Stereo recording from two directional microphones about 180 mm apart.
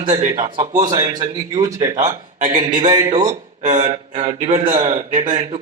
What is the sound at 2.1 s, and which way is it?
Speech, 45° right (ahead or behind).